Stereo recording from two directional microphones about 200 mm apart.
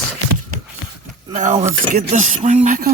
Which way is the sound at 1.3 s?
40° right (ahead or behind).